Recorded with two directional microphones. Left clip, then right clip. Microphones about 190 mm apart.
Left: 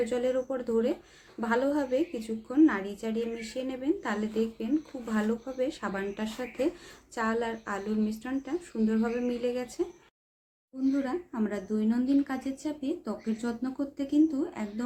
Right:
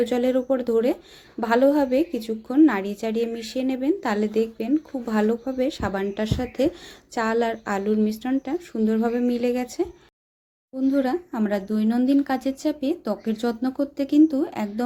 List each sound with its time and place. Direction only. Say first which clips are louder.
0.0 s a woman's voice: right 6 dB; 35° right (ahead or behind)
10.9 s a woman's voice: right 8 dB; 45° right (ahead or behind)